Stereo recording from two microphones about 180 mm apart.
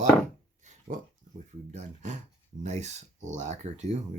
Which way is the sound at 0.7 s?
45° right (ahead or behind).